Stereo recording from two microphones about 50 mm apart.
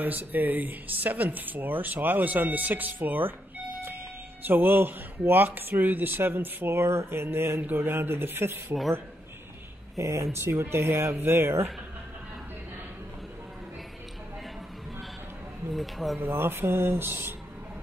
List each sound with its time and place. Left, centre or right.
0.0 s speech: right
9.9 s speech: right
15.7 s speech: centre
16.2 s speech: right